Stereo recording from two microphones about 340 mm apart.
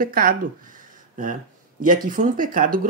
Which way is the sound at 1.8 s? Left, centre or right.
Right.